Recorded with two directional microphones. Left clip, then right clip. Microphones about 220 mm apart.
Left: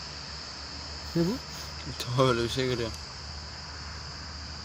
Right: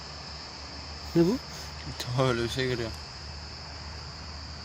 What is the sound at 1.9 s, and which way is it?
Speech, 5° left (ahead or behind).